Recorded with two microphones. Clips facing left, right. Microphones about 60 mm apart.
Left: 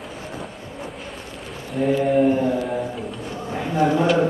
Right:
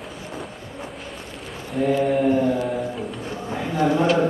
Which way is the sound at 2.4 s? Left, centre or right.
Centre.